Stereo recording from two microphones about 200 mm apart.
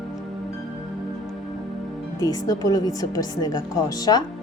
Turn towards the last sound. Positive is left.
turn(degrees=20)  # may be behind; listen again after turning